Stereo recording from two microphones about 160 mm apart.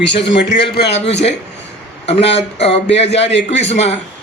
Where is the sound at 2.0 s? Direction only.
40° left (ahead or behind).